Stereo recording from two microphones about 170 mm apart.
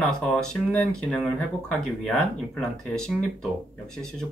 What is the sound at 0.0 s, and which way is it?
Speech, 5° left (ahead or behind).